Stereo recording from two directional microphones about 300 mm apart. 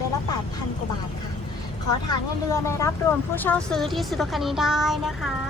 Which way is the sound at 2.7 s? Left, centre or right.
Centre.